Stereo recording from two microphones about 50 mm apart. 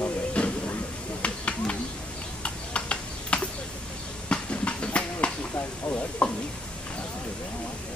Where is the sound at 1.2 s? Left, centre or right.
Left.